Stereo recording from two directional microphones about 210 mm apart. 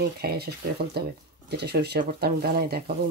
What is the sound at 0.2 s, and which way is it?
Speech, 50° right (ahead or behind).